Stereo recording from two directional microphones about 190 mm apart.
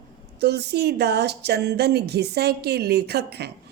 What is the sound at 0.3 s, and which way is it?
Speech, 60° right (ahead or behind).